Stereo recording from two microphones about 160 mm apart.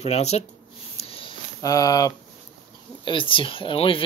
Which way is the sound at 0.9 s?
35° left (ahead or behind).